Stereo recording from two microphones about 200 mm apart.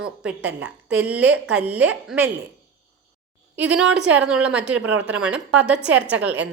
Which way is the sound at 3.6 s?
5° right (ahead or behind).